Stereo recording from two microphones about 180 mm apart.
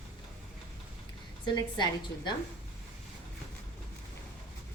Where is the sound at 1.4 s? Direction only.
25° left (ahead or behind).